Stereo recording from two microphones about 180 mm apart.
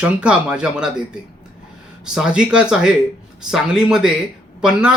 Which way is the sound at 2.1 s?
5° right (ahead or behind).